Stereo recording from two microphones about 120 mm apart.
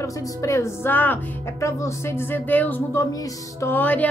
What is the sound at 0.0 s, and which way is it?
Speech, 25° left (ahead or behind).